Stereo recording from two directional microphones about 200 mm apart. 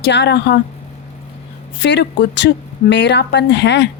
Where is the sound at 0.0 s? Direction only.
60° left (ahead or behind).